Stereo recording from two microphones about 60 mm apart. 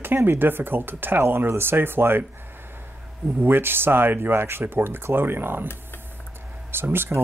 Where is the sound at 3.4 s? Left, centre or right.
Right.